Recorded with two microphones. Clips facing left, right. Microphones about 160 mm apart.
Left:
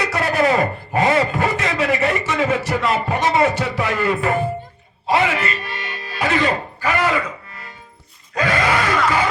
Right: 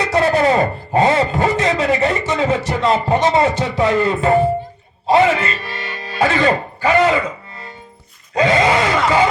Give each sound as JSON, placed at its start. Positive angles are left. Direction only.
{"t": 0.1, "sound": "a man's voice", "side_deg": -30}
{"t": 8.4, "sound": "gasp", "side_deg": -20}